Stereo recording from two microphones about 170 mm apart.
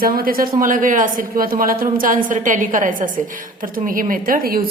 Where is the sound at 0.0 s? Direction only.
60° right (ahead or behind).